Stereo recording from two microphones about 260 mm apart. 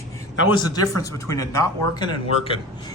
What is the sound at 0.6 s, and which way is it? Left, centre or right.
Speech, left.